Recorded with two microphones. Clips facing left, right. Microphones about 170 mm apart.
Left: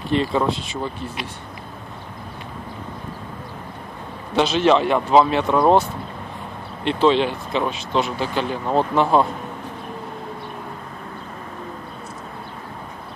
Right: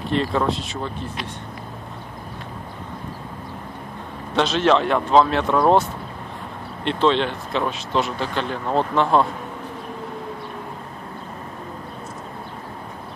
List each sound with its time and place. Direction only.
0.1 s speech: 5° left (ahead or behind)
4.4 s speech: centre (ahead or behind)